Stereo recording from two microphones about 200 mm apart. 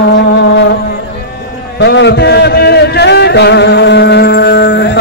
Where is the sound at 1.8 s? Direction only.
60° left (ahead or behind).